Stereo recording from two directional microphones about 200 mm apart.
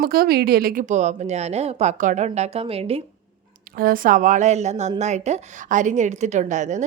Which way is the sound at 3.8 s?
45° right (ahead or behind).